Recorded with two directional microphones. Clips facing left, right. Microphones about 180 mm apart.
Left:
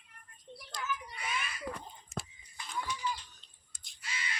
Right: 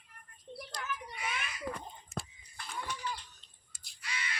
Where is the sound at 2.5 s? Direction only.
60° right (ahead or behind).